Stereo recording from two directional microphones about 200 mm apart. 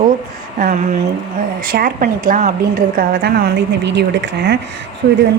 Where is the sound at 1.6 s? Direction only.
45° right (ahead or behind).